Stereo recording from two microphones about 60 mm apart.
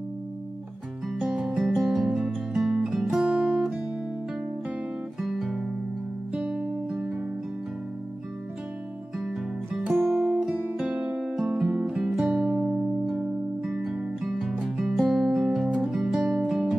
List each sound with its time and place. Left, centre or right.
1.2 s music: centre
3.3 s music: right
5.2 s music: centre
9.2 s music: centre
10.3 s music: centre